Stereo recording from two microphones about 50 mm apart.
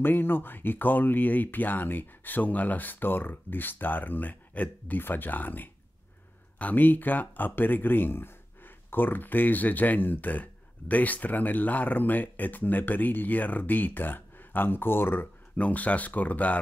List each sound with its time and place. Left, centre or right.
0.0 s speech: left
15.5 s speech: left